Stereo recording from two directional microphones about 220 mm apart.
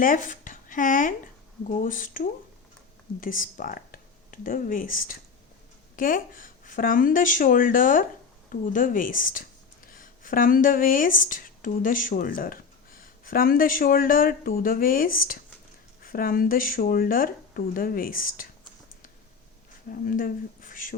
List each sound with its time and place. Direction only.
0.0 s speech: 35° left (ahead or behind)
19.9 s speech: 40° left (ahead or behind)